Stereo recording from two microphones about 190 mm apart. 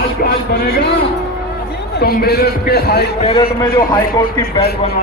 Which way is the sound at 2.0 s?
55° left (ahead or behind).